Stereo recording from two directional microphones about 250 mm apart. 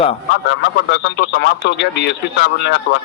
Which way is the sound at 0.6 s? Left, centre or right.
Left.